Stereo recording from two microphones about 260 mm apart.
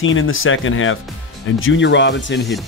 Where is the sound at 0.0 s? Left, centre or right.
Left.